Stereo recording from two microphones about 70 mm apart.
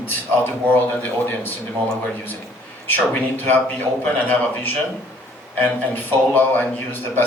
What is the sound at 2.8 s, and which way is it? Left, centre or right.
A man's voice, left.